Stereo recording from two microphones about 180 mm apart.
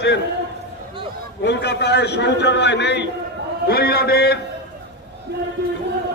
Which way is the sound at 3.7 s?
60° left (ahead or behind).